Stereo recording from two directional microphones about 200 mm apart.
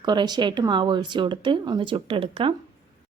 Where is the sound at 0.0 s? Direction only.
20° right (ahead or behind).